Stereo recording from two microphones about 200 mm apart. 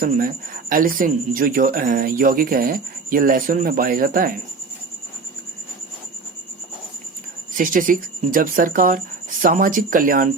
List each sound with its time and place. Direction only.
0.0 s speech: 45° right (ahead or behind)
7.5 s speech: 40° right (ahead or behind)